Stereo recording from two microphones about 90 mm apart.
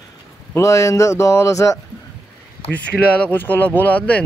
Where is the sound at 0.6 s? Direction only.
35° left (ahead or behind).